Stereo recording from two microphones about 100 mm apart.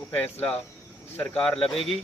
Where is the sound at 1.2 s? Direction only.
10° left (ahead or behind).